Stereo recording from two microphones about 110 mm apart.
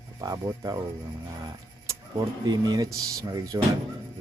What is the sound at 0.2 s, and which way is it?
Speech, 35° right (ahead or behind).